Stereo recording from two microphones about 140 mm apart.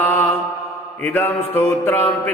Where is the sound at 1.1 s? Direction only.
15° left (ahead or behind).